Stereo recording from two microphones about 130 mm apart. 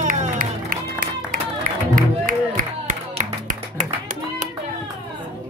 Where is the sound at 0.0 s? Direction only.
80° right.